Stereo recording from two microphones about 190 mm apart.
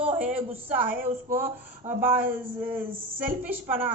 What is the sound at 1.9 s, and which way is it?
Speech, 10° right (ahead or behind).